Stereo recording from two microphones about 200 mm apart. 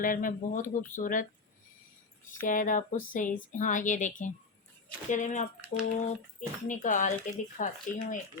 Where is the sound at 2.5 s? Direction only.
40° left (ahead or behind).